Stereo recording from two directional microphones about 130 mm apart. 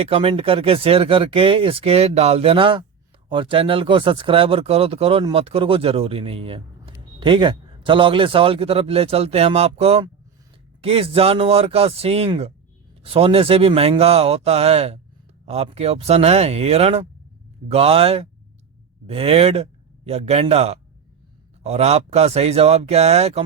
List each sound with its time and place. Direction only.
0.0 s speech: 45° right (ahead or behind)